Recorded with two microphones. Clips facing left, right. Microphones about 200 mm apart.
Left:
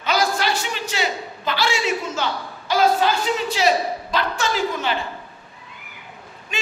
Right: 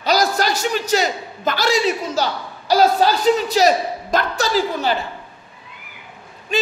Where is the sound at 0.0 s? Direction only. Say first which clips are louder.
Right 3 dB; 40° right (ahead or behind).